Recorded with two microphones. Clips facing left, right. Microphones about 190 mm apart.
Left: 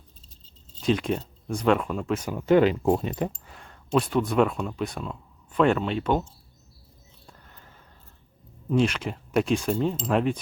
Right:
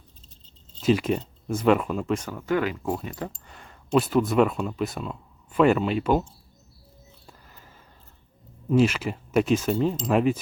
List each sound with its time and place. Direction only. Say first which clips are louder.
0.8 s speech: right 2 dB; 5° right (ahead or behind)
2.2 s speech: left 6 dB; 20° left (ahead or behind)
3.4 s speech: even; centre (ahead or behind)
7.3 s a sound: left 1 dB; 5° right (ahead or behind)
8.7 s speech: right 3 dB; 5° right (ahead or behind)